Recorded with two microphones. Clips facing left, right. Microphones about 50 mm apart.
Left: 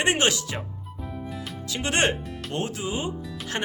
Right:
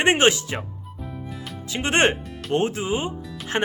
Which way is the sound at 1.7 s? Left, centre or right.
Right.